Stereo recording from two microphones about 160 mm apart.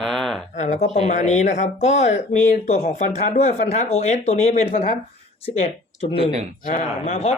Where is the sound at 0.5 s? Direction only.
50° left (ahead or behind).